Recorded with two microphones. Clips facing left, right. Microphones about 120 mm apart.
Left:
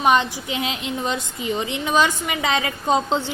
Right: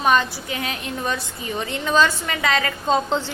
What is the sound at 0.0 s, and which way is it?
A woman's voice, 15° left (ahead or behind).